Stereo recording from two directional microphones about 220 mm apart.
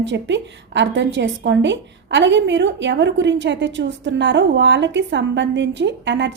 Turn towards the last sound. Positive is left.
turn(degrees=-55)  # may be behind; listen again after turning